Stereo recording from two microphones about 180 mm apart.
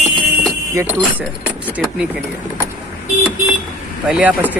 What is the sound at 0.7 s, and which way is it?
Speech, 10° right (ahead or behind).